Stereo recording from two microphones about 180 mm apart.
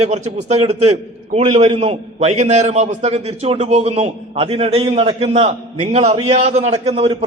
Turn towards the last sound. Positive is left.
turn(degrees=-30)  # may be behind; listen again after turning